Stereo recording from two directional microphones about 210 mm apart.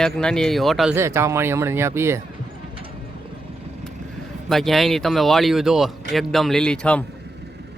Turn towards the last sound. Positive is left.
turn(degrees=5)  # may be behind; listen again after turning